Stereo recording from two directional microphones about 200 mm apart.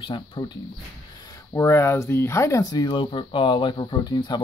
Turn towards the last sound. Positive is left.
turn(degrees=20)  # may be behind; listen again after turning